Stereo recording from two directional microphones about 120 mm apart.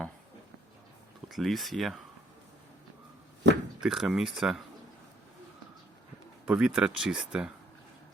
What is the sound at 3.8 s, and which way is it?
Speech, 5° right (ahead or behind).